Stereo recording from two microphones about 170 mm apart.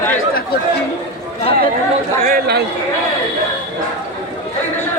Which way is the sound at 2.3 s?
70° right (ahead or behind).